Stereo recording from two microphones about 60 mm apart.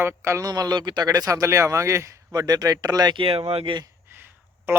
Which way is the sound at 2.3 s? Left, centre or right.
Right.